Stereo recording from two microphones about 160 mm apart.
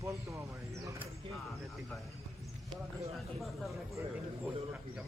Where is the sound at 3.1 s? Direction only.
Centre (ahead or behind).